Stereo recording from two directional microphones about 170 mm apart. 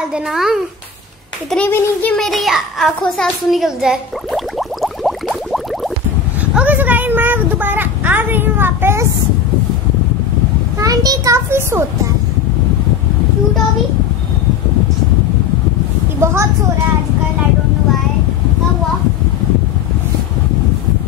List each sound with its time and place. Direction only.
0.1 s a child's voice: 5° right (ahead or behind)
1.5 s a child's voice: 10° left (ahead or behind)
6.5 s a sound: 10° right (ahead or behind)
10.8 s a child's voice: 20° right (ahead or behind)
16.2 s a woman's voice: 15° right (ahead or behind)